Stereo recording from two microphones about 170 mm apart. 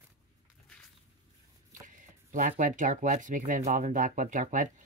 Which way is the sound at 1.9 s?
50° right (ahead or behind).